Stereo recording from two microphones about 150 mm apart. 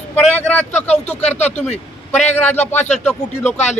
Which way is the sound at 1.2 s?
45° left (ahead or behind).